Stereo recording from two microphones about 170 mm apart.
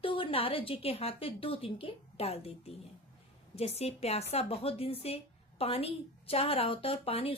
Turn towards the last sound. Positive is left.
turn(degrees=35)  # may be behind; listen again after turning